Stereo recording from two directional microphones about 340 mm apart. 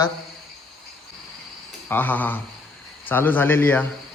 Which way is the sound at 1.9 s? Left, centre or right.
Centre.